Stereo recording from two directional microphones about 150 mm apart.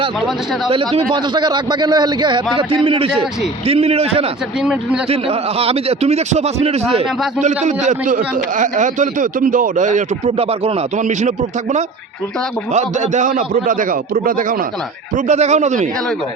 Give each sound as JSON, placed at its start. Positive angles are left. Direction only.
{"t": 1.1, "sound": "a man's voice", "side_deg": -30}
{"t": 4.6, "sound": "speech", "side_deg": -5}
{"t": 5.0, "sound": "a man's voice", "side_deg": -40}
{"t": 7.9, "sound": "a man's voice", "side_deg": -60}
{"t": 15.1, "sound": "a man's voice", "side_deg": -50}